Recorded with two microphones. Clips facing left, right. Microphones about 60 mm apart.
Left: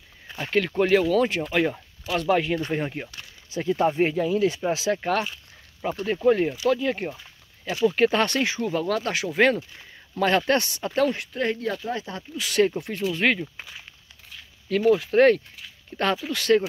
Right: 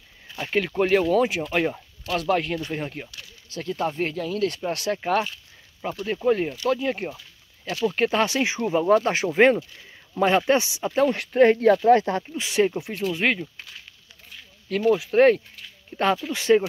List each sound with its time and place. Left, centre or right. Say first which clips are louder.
0.4 s speech: even; centre
2.0 s speech: left 1 dB; centre
7.2 s a sound: left 1 dB; left
7.8 s speech: left 2 dB; centre
8.5 s speech: right 5 dB; right
9.3 s speech: right 3 dB; centre
11.3 s speech: right 10 dB; right
11.8 s speech: right 13 dB; right
12.5 s speech: even; centre
13.6 s speech: left 2 dB; centre
14.3 s speech: left 2 dB; centre
16.3 s speech: even; centre